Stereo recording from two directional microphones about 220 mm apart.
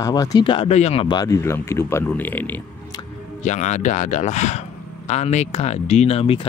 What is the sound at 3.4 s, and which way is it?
Speech, 30° left (ahead or behind).